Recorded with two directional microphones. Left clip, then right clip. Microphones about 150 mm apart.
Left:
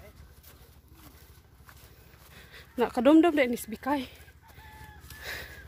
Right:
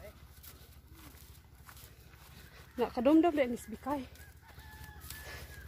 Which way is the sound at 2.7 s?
50° left (ahead or behind).